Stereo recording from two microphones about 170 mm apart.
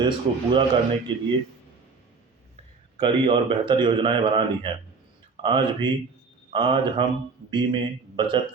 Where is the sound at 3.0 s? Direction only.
30° right (ahead or behind).